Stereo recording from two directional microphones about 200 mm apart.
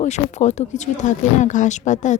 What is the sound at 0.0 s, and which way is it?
Speech, 35° left (ahead or behind).